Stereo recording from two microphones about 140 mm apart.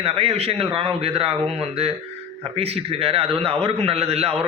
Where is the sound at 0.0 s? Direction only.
45° right (ahead or behind).